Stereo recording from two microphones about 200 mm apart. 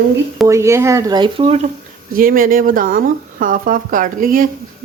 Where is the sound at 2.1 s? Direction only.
45° right (ahead or behind).